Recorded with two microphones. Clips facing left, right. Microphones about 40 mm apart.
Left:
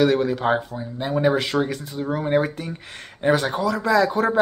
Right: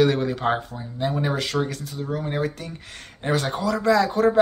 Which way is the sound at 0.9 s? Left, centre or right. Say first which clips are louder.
Left 4 dB; centre.